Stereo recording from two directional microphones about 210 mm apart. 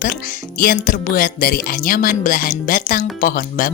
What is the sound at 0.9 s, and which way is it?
Speech, 40° left (ahead or behind).